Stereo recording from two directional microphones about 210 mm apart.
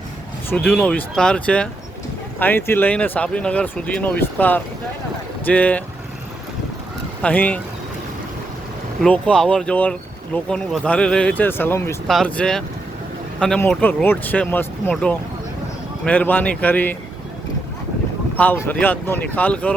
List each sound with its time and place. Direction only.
0.5 s speech: 5° left (ahead or behind)
7.2 s speech: 5° left (ahead or behind)
9.0 s speech: 5° left (ahead or behind)
18.3 s speech: 10° left (ahead or behind)